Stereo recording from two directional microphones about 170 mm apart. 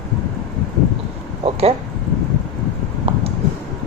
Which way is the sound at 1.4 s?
35° right (ahead or behind).